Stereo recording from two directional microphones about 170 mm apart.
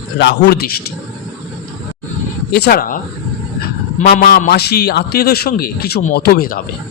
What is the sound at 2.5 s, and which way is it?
Speech, 65° left (ahead or behind).